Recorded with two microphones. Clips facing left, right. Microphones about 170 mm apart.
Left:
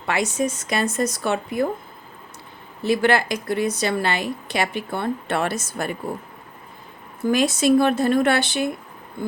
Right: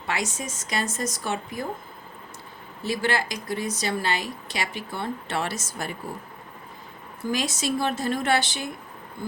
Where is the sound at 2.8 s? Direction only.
60° left (ahead or behind).